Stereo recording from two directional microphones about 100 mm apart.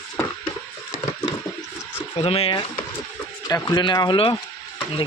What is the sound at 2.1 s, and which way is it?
Speech, 75° left (ahead or behind).